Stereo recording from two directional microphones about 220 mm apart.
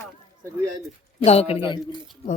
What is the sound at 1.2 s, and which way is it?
Speech, 30° left (ahead or behind).